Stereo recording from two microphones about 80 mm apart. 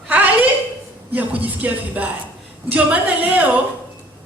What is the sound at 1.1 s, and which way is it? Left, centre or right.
A woman's voice, centre.